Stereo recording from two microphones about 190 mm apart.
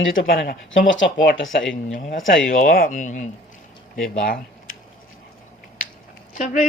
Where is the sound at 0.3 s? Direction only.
55° left (ahead or behind).